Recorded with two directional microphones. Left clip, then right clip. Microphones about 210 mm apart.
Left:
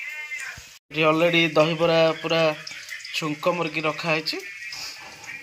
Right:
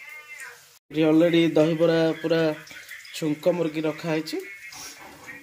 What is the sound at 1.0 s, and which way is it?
Speech, 5° right (ahead or behind).